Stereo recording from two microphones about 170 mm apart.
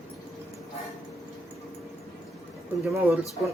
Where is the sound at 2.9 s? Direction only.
15° right (ahead or behind).